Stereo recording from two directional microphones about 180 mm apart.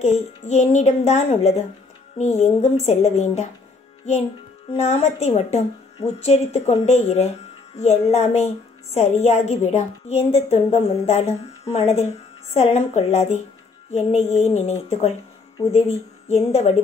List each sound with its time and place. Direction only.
0.0 s a woman's voice: 40° left (ahead or behind)
4.7 s a woman's voice: 35° left (ahead or behind)
16.3 s a woman's voice: 35° left (ahead or behind)